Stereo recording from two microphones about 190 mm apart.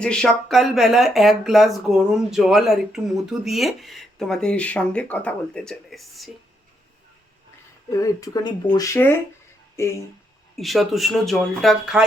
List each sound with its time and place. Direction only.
0.0 s speech: 5° left (ahead or behind)
7.9 s speech: 20° left (ahead or behind)
10.6 s speech: centre (ahead or behind)